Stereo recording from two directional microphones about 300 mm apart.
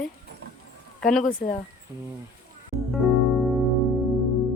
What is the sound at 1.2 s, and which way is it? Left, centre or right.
Speech, left.